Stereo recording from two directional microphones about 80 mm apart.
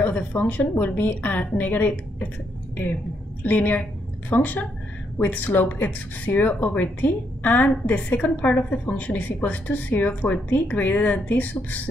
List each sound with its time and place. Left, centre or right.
0.0 s speech: centre
3.4 s speech: left